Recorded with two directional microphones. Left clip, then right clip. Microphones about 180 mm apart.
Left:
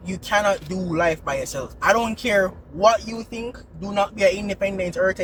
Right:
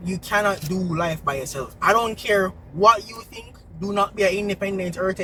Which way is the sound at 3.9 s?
25° left (ahead or behind).